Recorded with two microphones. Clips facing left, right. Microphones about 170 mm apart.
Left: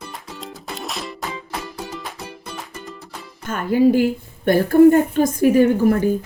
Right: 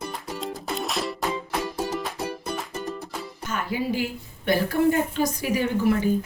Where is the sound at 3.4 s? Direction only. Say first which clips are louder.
Left 12 dB; 50° left (ahead or behind).